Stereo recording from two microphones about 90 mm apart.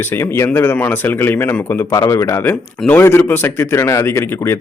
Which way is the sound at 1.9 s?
35° left (ahead or behind).